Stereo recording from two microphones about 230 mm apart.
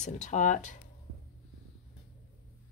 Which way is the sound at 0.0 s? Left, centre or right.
Left.